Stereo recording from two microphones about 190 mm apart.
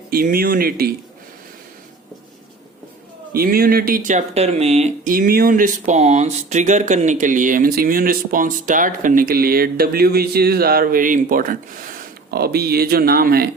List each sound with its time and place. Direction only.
0.1 s speech: 50° right (ahead or behind)
3.3 s speech: 50° right (ahead or behind); by 5.1 s 35° right (ahead or behind)
5.1 s speech: 50° right (ahead or behind)